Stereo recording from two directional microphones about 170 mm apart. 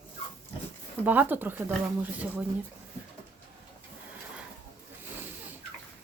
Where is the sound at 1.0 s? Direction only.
10° right (ahead or behind).